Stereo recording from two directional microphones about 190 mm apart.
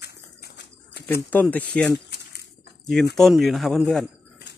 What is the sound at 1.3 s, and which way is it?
Speech, 10° left (ahead or behind).